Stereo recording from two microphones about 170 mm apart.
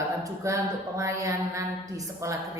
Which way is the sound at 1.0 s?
20° right (ahead or behind).